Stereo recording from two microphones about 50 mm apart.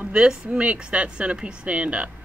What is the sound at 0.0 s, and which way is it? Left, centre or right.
Speech, right.